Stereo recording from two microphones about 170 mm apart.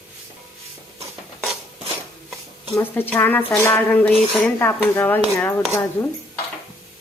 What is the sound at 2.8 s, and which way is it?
Speech, 10° left (ahead or behind).